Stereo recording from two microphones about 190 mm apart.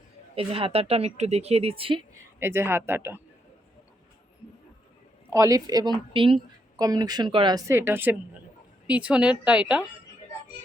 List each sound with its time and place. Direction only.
0.3 s speech: 30° right (ahead or behind)
2.4 s speech: 15° right (ahead or behind)
5.3 s a woman's voice: 15° right (ahead or behind)